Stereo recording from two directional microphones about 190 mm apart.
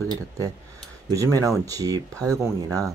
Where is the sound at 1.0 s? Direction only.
15° right (ahead or behind).